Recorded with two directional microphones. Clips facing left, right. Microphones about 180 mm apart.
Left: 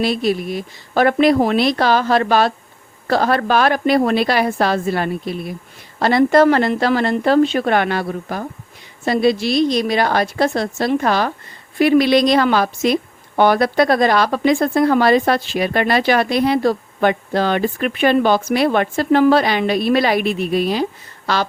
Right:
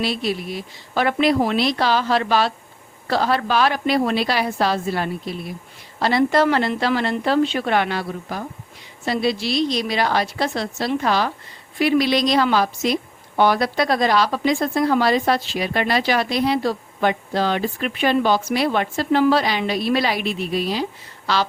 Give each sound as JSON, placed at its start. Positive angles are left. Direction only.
{"t": 0.0, "sound": "a woman's voice", "side_deg": 50}